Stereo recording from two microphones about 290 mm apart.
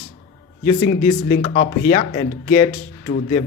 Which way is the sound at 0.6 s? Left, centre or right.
Left.